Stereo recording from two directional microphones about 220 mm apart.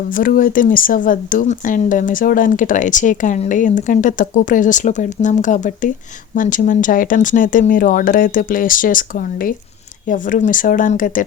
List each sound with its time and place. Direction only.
0.1 s speech: 40° left (ahead or behind)